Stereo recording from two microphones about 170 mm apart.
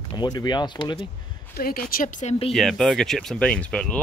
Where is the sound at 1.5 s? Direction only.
60° left (ahead or behind).